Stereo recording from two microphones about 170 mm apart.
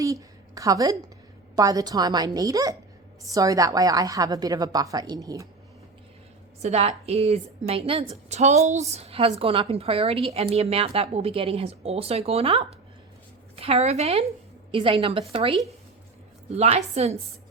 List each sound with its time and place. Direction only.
0.0 s a sound: 20° right (ahead or behind)
1.5 s a woman's voice: 20° right (ahead or behind)
6.6 s a woman's voice: 40° right (ahead or behind)